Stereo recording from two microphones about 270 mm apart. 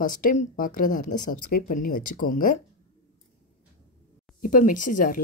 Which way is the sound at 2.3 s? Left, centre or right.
Left.